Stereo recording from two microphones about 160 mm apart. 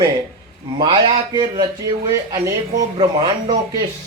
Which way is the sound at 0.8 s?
30° right (ahead or behind).